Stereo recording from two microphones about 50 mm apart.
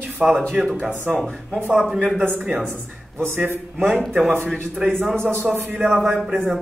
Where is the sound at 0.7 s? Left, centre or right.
Right.